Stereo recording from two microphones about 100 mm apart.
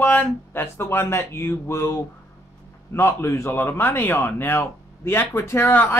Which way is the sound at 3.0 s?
25° left (ahead or behind).